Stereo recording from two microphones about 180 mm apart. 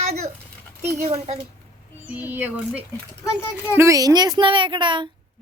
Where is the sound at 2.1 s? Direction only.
10° right (ahead or behind); by 5.0 s 25° right (ahead or behind).